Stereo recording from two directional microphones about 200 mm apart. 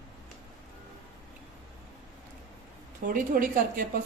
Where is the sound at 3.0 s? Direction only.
40° right (ahead or behind).